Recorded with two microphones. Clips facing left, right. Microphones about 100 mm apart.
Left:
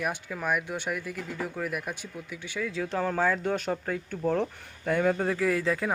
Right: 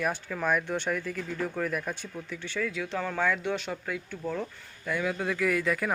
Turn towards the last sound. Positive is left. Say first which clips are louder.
# left 1 dB
turn(degrees=30)  # may be behind; listen again after turning